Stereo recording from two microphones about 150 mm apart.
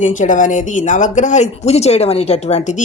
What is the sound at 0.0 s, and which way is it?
Speech, 55° left (ahead or behind).